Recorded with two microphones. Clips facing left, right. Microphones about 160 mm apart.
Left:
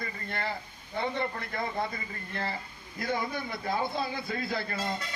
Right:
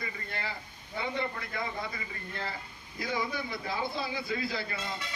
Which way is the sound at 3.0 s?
50° left (ahead or behind).